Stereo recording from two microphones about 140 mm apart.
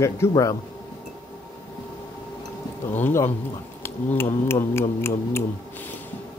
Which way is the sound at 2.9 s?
15° left (ahead or behind).